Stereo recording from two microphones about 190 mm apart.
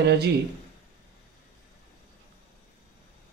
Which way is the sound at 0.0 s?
60° right (ahead or behind).